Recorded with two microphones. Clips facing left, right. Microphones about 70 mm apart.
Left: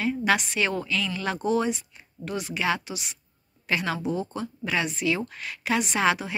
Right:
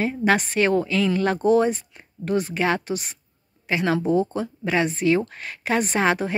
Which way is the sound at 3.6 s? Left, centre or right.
Right.